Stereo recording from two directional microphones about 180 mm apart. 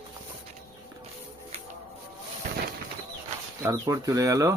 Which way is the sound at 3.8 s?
20° right (ahead or behind).